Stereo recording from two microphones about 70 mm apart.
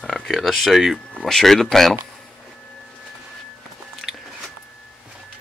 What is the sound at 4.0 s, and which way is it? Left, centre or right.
Biting, centre.